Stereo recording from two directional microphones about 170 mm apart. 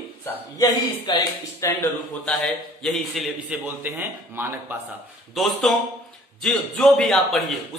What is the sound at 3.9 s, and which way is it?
Speech, 15° right (ahead or behind).